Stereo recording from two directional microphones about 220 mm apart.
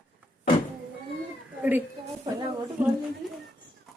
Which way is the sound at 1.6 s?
10° right (ahead or behind).